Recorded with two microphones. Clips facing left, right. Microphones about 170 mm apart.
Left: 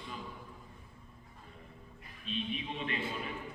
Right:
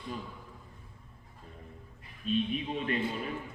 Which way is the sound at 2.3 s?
45° right (ahead or behind).